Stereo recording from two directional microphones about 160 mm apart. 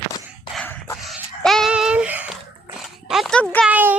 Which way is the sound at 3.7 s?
10° right (ahead or behind).